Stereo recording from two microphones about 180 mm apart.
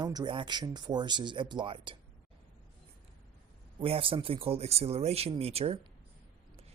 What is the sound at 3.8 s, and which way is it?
Speech, 30° right (ahead or behind).